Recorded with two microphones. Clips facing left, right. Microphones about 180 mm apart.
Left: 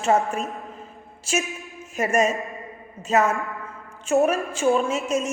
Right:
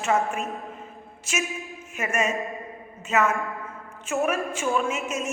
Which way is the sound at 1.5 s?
Centre (ahead or behind).